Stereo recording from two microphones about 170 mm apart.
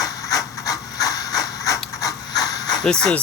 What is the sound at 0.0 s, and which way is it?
Ratchet, 20° left (ahead or behind).